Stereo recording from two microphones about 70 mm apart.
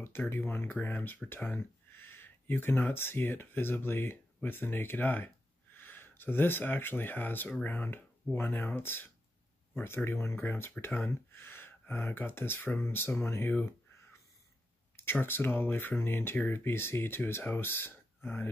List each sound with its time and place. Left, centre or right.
0.0 s speech: left
15.0 s speech: left